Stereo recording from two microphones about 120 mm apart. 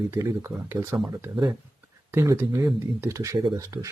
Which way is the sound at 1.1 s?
30° right (ahead or behind).